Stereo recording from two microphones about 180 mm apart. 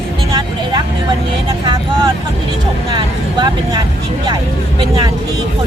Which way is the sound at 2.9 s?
25° right (ahead or behind).